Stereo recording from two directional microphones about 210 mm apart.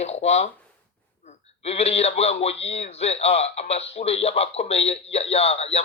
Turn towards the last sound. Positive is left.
turn(degrees=30)  # may be behind; listen again after turning